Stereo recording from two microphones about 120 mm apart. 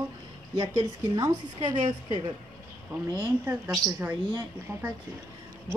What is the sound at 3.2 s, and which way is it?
Speech, 15° right (ahead or behind).